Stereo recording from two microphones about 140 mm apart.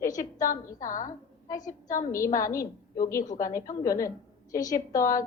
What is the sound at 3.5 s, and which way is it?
A woman's voice, 25° left (ahead or behind).